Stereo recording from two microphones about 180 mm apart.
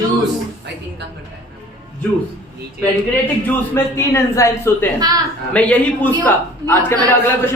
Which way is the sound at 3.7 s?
15° left (ahead or behind).